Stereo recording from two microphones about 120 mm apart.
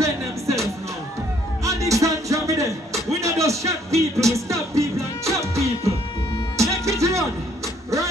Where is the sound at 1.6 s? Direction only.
25° right (ahead or behind).